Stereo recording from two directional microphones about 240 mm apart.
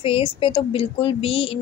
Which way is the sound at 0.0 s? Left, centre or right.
Left.